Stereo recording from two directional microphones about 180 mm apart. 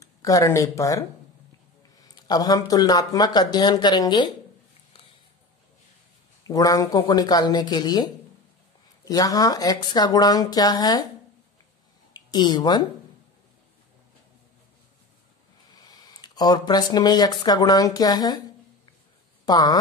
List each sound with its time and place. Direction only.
0.0 s speech: 20° left (ahead or behind)
6.4 s speech: 20° left (ahead or behind)
12.1 s speech: 25° left (ahead or behind)
15.7 s speech: 20° left (ahead or behind)
19.4 s speech: 20° left (ahead or behind)